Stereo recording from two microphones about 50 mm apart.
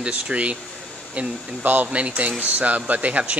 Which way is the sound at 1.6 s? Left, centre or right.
Right.